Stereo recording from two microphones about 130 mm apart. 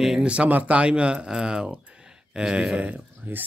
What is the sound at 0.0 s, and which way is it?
Speech, 5° right (ahead or behind).